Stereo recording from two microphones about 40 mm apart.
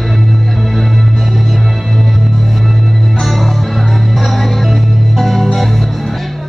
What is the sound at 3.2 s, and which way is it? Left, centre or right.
Music, centre.